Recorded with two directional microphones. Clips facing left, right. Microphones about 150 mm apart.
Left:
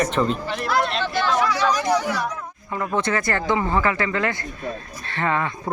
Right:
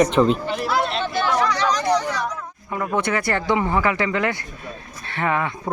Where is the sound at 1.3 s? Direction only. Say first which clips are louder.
Right 1 dB; 5° left (ahead or behind).